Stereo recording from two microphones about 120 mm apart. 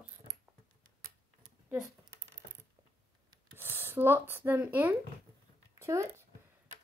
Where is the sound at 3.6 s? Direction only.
20° right (ahead or behind).